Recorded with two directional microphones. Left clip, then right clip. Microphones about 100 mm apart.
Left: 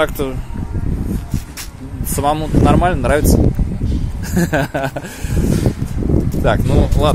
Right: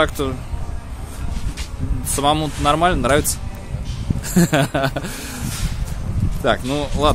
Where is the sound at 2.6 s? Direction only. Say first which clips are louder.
Even; 15° right (ahead or behind).